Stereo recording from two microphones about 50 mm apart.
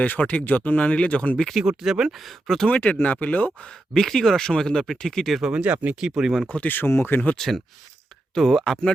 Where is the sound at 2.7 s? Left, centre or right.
Left.